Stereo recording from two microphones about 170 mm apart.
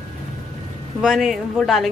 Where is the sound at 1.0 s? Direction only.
Centre (ahead or behind).